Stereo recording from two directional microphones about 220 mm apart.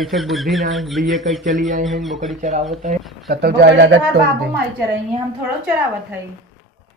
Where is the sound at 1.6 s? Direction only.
35° right (ahead or behind).